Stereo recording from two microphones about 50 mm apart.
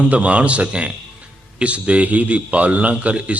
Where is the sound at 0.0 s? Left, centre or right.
Right.